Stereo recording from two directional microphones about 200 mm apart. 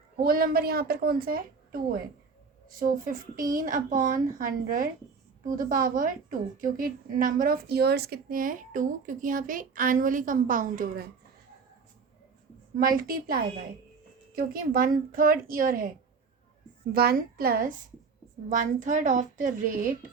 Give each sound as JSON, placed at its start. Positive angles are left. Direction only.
{"t": 0.2, "sound": "a woman's voice", "side_deg": -45}
{"t": 12.8, "sound": "a woman's voice", "side_deg": -45}
{"t": 16.9, "sound": "a woman's voice", "side_deg": -50}